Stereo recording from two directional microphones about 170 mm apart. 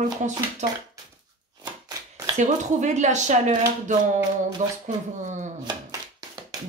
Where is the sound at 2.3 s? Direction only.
45° right (ahead or behind).